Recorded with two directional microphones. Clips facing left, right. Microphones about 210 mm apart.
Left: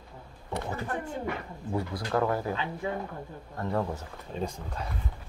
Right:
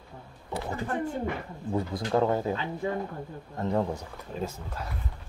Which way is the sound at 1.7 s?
20° right (ahead or behind).